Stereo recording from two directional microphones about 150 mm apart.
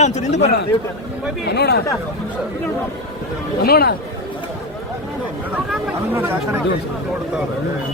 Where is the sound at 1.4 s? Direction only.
90° left.